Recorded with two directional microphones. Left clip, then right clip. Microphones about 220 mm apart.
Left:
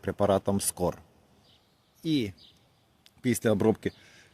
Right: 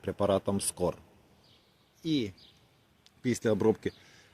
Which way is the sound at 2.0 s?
45° left (ahead or behind).